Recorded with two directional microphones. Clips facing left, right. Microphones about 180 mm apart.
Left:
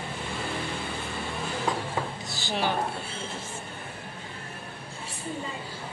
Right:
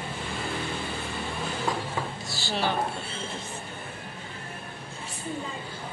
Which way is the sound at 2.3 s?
15° left (ahead or behind).